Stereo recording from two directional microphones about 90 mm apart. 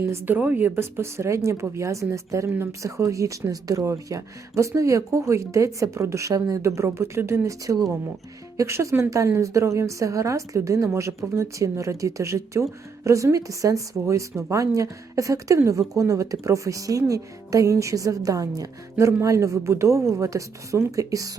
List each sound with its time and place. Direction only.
0.0 s speech: 25° right (ahead or behind); by 21.3 s 40° right (ahead or behind)